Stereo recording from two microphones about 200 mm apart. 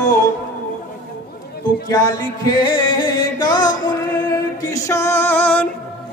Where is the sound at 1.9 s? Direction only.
20° left (ahead or behind).